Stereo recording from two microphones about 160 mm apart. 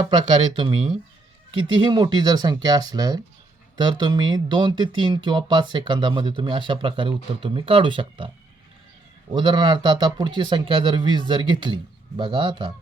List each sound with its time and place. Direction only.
0.0 s speech: 30° right (ahead or behind)
9.3 s speech: 30° right (ahead or behind)